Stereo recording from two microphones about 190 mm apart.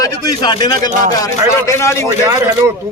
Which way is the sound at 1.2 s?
15° left (ahead or behind).